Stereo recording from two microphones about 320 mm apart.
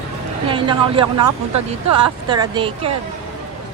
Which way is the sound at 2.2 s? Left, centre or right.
Centre.